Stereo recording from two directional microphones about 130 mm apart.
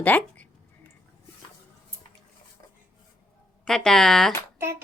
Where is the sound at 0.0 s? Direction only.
10° left (ahead or behind).